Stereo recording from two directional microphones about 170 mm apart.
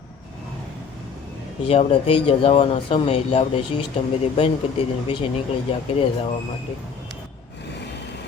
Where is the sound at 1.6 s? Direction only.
35° left (ahead or behind).